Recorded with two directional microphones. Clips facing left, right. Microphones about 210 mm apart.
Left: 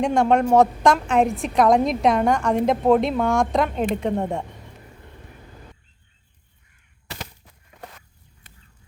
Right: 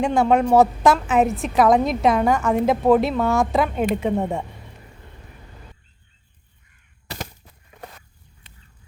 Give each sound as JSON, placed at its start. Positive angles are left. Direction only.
{"t": 0.0, "sound": "a woman's voice", "side_deg": -5}
{"t": 7.1, "sound": "honk", "side_deg": -35}